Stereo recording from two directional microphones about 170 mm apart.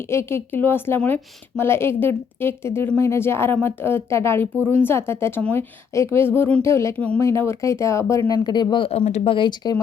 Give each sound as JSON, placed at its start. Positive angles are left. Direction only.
{"t": 0.0, "sound": "a woman's voice", "side_deg": 15}